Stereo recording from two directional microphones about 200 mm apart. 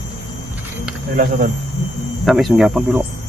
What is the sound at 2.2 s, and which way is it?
Speech, centre (ahead or behind).